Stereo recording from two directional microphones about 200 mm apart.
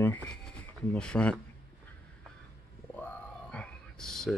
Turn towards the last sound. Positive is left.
turn(degrees=5)  # may be behind; listen again after turning